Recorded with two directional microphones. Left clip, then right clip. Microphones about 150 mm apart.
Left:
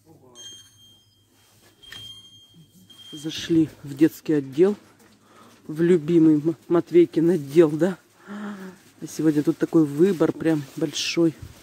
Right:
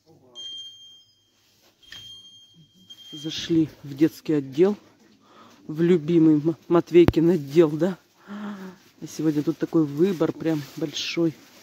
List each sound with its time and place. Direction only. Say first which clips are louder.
3.2 s speech: left 1 dB; centre (ahead or behind)